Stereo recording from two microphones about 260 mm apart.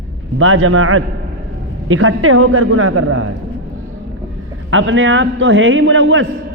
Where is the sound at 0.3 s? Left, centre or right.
Right.